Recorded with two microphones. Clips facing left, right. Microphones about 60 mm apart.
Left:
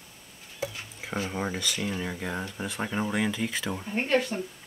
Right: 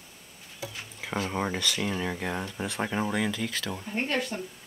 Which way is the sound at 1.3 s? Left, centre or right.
Centre.